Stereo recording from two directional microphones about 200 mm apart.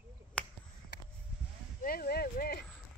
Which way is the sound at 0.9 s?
55° left (ahead or behind).